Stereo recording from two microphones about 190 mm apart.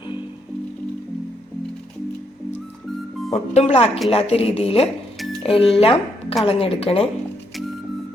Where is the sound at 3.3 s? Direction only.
35° left (ahead or behind).